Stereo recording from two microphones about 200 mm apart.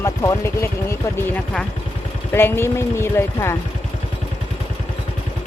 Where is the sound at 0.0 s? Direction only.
15° left (ahead or behind).